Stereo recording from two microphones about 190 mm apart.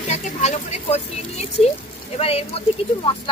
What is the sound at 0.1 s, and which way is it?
A woman's voice, 35° left (ahead or behind).